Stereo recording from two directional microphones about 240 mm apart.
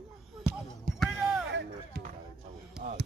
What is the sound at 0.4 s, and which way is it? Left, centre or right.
Music, centre.